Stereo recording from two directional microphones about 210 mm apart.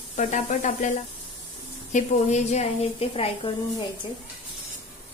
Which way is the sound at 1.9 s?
35° left (ahead or behind).